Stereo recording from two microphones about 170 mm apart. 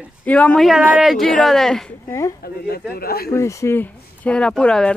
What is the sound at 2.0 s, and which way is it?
Speech, 15° left (ahead or behind).